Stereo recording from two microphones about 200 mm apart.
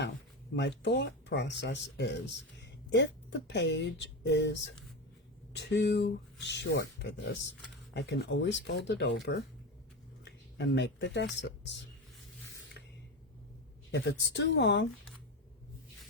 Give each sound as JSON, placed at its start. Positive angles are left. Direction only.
{"t": 0.5, "sound": "speech", "side_deg": 60}
{"t": 13.9, "sound": "speech", "side_deg": 60}